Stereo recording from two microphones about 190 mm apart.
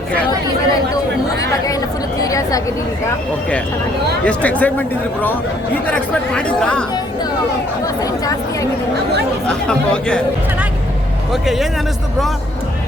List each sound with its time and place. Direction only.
4.3 s speech: 10° left (ahead or behind)
8.0 s chatter: 20° left (ahead or behind)
9.5 s speech: 5° left (ahead or behind)
11.3 s speech: centre (ahead or behind)